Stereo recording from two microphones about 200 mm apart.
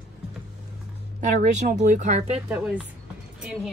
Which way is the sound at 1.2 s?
35° right (ahead or behind).